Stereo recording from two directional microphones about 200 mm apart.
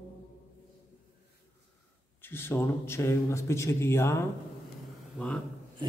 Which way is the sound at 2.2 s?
10° left (ahead or behind).